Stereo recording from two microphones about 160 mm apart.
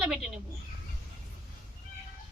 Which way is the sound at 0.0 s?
5° right (ahead or behind).